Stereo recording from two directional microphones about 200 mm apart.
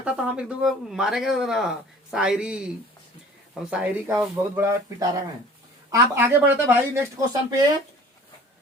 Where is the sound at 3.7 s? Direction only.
5° right (ahead or behind).